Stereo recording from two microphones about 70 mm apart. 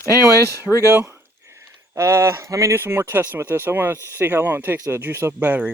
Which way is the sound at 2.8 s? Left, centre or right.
Right.